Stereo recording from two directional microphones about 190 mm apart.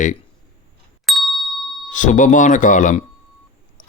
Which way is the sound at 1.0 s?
Centre (ahead or behind).